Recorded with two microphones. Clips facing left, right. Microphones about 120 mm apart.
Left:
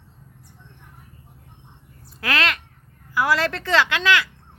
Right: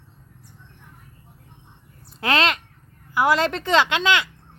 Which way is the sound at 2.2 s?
25° right (ahead or behind).